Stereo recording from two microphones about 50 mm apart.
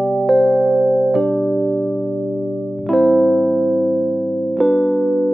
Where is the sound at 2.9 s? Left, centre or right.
Centre.